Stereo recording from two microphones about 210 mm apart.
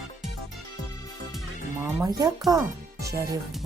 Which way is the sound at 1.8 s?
15° right (ahead or behind).